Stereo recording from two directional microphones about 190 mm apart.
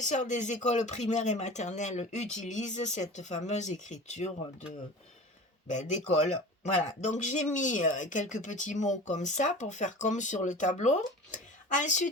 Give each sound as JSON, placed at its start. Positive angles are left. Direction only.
{"t": 0.0, "sound": "speech", "side_deg": 40}
{"t": 5.6, "sound": "speech", "side_deg": 40}